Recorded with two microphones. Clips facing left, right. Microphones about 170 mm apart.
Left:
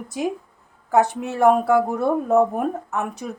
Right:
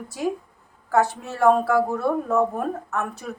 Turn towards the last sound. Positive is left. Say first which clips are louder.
# left 2 dB
turn(degrees=15)  # may be behind; listen again after turning